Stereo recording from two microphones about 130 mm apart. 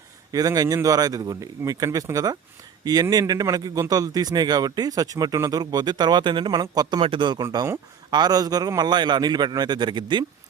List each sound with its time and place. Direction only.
0.3 s a man's voice: 30° right (ahead or behind)